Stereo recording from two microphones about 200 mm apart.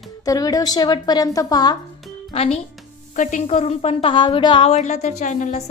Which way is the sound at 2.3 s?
30° left (ahead or behind).